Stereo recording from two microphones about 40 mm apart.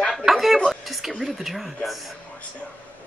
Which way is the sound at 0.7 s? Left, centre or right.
Centre.